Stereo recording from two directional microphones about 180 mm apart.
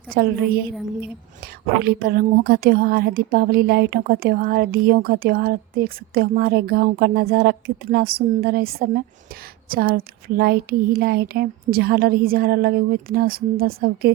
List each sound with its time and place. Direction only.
0.1 s a woman's voice: 55° right (ahead or behind)
1.8 s a woman's voice: 55° right (ahead or behind)